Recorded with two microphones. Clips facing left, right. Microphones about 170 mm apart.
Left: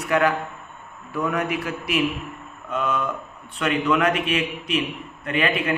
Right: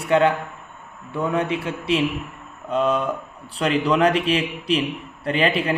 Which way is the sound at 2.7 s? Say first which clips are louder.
Right 4 dB; 30° right (ahead or behind).